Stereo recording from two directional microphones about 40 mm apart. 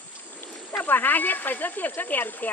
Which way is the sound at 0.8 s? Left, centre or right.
Left.